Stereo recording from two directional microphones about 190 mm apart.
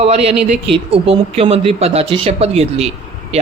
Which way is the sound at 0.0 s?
30° right (ahead or behind).